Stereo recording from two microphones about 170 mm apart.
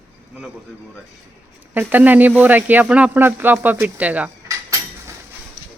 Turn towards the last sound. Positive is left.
turn(degrees=-20)  # may be behind; listen again after turning